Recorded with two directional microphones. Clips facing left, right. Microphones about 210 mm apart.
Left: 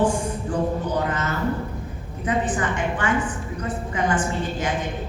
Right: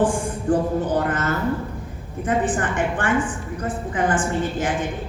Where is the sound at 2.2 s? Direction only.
55° right (ahead or behind).